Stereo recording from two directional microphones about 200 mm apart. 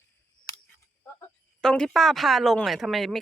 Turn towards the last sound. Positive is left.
turn(degrees=0)  # may be behind; listen again after turning